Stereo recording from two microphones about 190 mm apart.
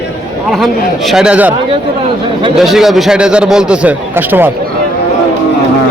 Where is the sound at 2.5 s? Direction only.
Centre (ahead or behind).